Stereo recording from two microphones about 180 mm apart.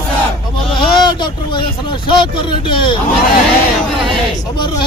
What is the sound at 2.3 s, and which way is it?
Speech, 25° left (ahead or behind).